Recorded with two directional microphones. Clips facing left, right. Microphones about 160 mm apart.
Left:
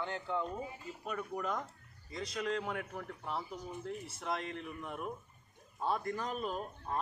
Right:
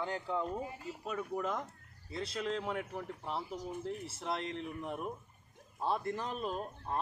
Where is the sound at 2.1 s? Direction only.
30° right (ahead or behind).